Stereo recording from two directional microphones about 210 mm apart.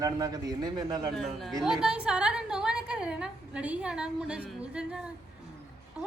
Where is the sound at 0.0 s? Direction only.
15° right (ahead or behind).